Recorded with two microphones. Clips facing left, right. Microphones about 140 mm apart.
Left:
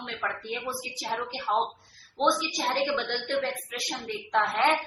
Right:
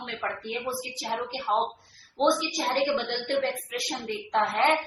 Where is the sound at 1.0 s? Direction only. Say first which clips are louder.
Right 1 dB; 20° right (ahead or behind).